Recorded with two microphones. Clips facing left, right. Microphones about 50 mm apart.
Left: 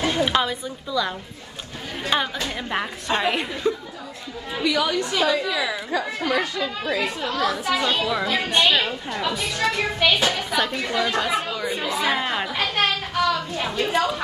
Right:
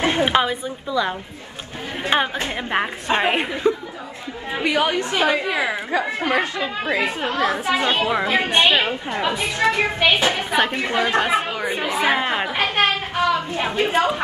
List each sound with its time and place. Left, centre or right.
0.0 s a woman's voice: right